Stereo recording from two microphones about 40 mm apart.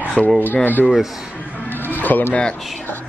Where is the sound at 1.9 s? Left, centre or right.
Left.